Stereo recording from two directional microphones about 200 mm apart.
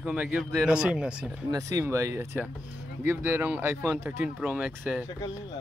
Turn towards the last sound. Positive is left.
turn(degrees=-5)  # may be behind; listen again after turning